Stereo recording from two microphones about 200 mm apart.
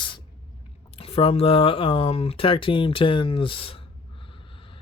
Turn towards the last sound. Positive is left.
turn(degrees=25)  # may be behind; listen again after turning